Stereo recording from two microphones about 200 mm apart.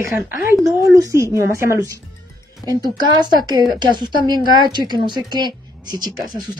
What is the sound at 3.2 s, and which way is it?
Speech, 20° right (ahead or behind).